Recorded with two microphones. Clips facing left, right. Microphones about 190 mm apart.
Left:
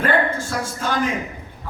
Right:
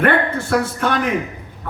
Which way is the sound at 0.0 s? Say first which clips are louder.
Right 3 dB; 65° right (ahead or behind).